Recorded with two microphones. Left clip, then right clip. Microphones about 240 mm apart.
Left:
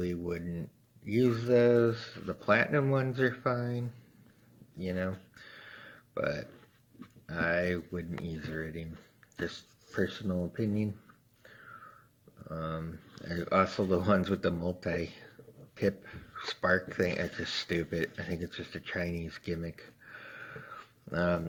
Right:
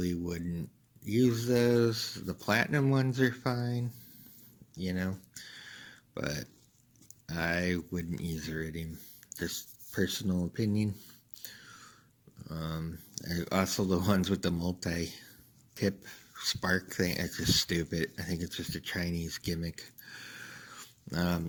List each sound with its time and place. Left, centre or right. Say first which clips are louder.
0.0 s speech: left 1 dB; right
4.8 s a sound: left 2 dB; right
7.3 s speech: left 2 dB; right
12.5 s speech: left 3 dB; right